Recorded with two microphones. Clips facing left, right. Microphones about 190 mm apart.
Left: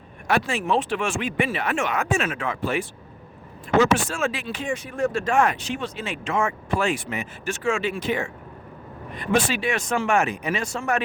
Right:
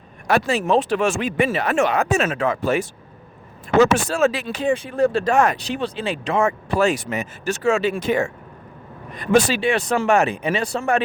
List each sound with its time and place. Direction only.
0.3 s speech: 40° right (ahead or behind)